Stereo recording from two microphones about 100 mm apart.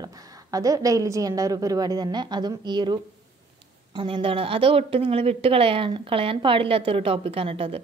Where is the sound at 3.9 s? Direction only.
60° right (ahead or behind).